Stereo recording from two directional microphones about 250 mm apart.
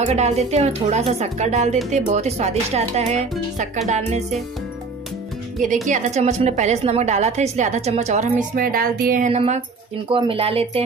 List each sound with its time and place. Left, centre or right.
0.0 s a woman's voice: right
5.9 s a woman's voice: right